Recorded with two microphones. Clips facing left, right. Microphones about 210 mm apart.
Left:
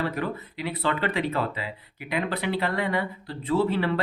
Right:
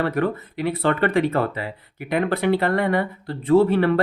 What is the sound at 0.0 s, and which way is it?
Speech, 55° right (ahead or behind).